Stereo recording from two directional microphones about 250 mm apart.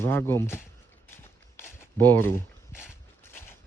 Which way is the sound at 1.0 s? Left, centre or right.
Centre.